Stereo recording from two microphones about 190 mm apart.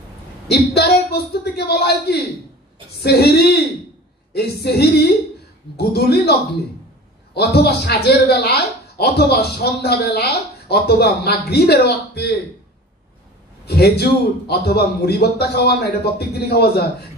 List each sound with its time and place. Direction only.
0.5 s speech: 55° left (ahead or behind)
7.3 s speech: 55° left (ahead or behind)
13.7 s a man's voice: 55° left (ahead or behind)